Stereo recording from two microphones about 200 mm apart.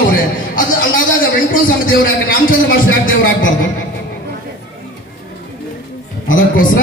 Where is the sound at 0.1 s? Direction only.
45° left (ahead or behind).